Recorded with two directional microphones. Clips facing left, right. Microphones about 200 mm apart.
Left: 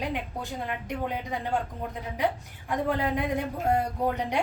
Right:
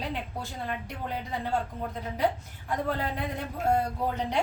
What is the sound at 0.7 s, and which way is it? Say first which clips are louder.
Speech: left 4 dB; 15° left (ahead or behind).